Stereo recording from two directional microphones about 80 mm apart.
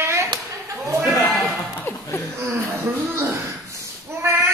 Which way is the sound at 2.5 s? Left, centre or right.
Right.